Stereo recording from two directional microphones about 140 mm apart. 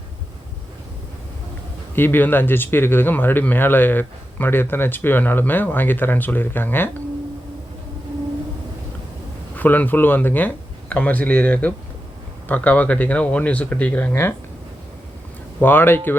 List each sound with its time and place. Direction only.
2.0 s speech: 15° left (ahead or behind)
9.6 s speech: 10° left (ahead or behind)
15.6 s speech: 15° left (ahead or behind)